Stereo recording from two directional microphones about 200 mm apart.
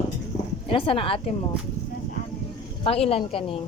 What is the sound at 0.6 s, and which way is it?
Speech, 25° left (ahead or behind).